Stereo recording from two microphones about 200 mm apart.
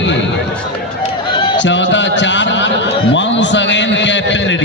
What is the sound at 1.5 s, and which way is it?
Speech, 65° left (ahead or behind).